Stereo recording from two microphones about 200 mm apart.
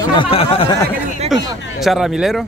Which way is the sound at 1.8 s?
Centre (ahead or behind).